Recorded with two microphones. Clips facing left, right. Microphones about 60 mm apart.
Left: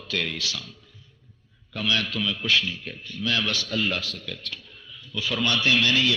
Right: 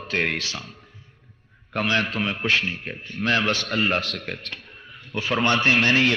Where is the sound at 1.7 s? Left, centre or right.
Right.